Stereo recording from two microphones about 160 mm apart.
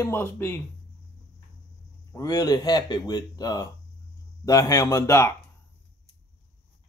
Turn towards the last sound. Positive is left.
turn(degrees=20)  # may be behind; listen again after turning